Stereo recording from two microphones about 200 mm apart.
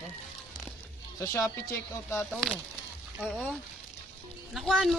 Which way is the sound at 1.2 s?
15° left (ahead or behind).